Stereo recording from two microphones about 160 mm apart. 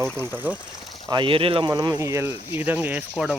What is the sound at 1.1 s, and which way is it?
Speech, 30° right (ahead or behind).